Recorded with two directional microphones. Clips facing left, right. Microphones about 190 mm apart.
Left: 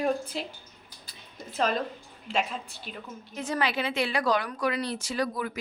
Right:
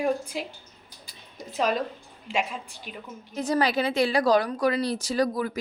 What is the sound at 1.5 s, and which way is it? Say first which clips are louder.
Speech: right 2 dB; 10° right (ahead or behind).